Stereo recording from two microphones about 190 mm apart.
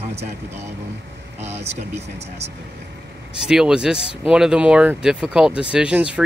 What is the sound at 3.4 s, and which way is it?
Speech, 5° right (ahead or behind).